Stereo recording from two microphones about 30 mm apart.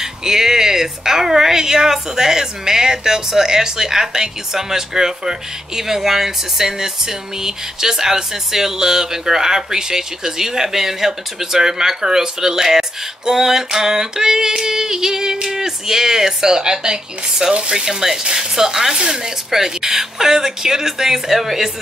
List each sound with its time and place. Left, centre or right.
0.0 s speech: centre
13.3 s female singing: centre
17.7 s speech: centre
18.2 s female singing: right
19.5 s speech: centre